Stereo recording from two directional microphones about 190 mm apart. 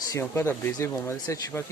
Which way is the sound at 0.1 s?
15° left (ahead or behind).